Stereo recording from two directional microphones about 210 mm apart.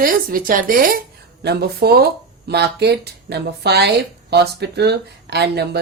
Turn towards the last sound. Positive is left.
turn(degrees=-50)  # may be behind; listen again after turning